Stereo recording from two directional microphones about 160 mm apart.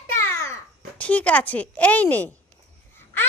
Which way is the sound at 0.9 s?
10° left (ahead or behind).